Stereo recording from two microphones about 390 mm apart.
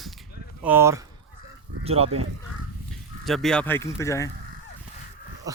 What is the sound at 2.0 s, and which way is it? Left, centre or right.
Speech, right.